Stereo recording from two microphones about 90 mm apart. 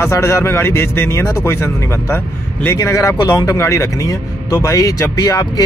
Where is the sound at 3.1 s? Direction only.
50° left (ahead or behind).